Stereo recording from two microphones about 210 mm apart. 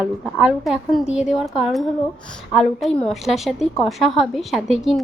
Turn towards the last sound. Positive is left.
turn(degrees=0)  # may be behind; listen again after turning